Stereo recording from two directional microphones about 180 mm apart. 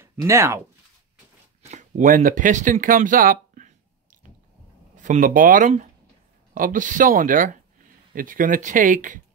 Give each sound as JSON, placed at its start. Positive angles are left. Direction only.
{"t": 0.0, "sound": "speech", "side_deg": -15}
{"t": 1.6, "sound": "speech", "side_deg": -40}
{"t": 4.9, "sound": "speech", "side_deg": -45}